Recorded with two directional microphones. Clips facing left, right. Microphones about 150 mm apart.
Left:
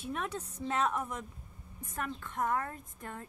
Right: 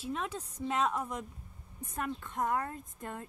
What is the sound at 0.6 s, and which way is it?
A woman's voice, 15° right (ahead or behind).